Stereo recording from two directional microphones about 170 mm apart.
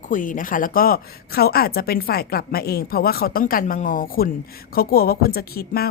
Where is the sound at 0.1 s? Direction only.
50° left (ahead or behind).